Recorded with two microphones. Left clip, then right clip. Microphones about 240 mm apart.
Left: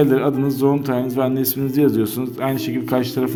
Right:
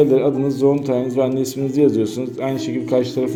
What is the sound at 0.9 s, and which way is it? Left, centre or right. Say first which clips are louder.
A man's voice: right 2 dB; left.